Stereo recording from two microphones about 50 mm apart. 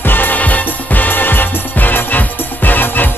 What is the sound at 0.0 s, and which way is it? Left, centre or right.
Music, left.